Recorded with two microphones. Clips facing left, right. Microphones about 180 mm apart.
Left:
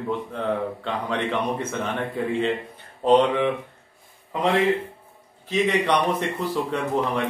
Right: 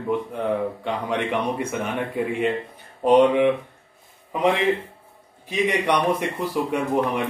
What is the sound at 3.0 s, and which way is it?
A man's voice, 15° right (ahead or behind).